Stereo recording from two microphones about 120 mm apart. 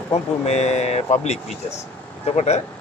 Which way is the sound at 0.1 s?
65° left (ahead or behind).